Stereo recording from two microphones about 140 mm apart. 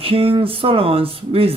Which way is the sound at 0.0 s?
40° right (ahead or behind).